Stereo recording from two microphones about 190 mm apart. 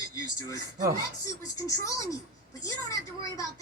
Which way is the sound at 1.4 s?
15° left (ahead or behind).